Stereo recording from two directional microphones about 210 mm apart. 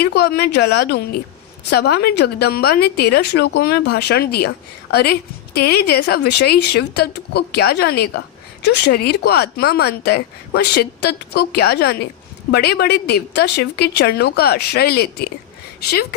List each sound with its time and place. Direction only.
0.0 s speech: 50° left (ahead or behind)